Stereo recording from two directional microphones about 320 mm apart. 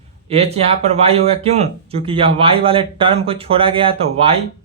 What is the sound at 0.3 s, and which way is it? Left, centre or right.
Speech, centre.